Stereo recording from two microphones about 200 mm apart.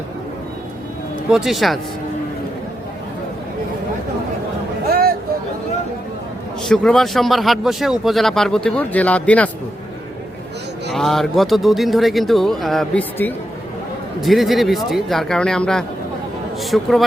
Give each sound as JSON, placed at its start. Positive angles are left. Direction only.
{"t": 1.3, "sound": "a man's voice", "side_deg": 0}
{"t": 4.9, "sound": "a sound", "side_deg": -50}
{"t": 6.7, "sound": "a man's voice", "side_deg": 0}
{"t": 10.9, "sound": "a man's voice", "side_deg": 0}